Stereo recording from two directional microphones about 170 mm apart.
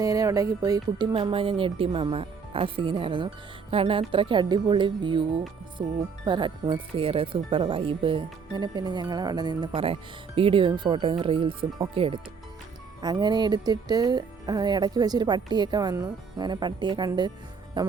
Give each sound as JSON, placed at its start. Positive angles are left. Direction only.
{"t": 0.0, "sound": "music", "side_deg": -20}
{"t": 5.8, "sound": "speech", "side_deg": -35}
{"t": 13.0, "sound": "music", "side_deg": -25}